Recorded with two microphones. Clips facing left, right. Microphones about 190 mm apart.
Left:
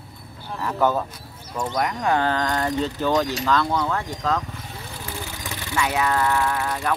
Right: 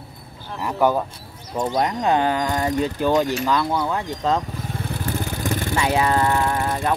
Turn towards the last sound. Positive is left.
turn(degrees=-25)  # may be behind; listen again after turning